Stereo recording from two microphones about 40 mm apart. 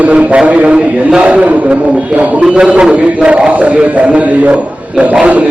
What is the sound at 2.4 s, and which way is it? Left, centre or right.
A man's voice, right.